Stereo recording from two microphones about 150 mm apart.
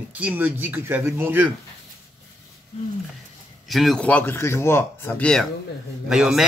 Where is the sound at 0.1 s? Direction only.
10° right (ahead or behind).